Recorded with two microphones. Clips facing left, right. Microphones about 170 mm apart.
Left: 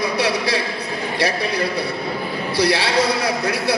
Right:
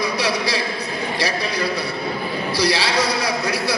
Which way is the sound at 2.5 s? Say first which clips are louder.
Left 2 dB; 55° left (ahead or behind).